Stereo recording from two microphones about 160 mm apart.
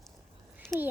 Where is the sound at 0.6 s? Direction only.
5° left (ahead or behind).